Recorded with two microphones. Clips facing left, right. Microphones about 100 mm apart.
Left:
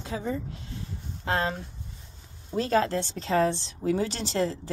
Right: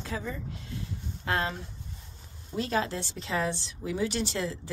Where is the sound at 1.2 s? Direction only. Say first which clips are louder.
Left 3 dB; 30° left (ahead or behind).